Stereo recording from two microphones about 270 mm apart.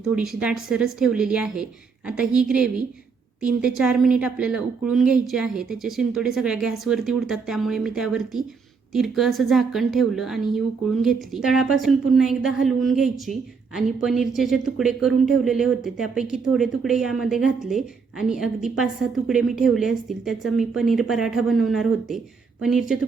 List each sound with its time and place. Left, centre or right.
0.0 s a woman's voice: centre